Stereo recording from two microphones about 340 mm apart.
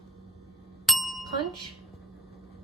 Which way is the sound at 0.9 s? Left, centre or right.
Centre.